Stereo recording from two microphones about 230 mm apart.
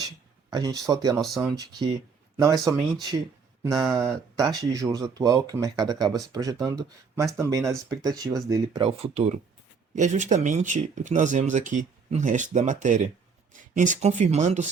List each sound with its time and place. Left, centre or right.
0.9 s speech: centre
1.2 s speech: centre
2.4 s speech: centre
3.7 s speech: centre
3.9 s speech: centre
7.6 s speech: centre
8.0 s speech: centre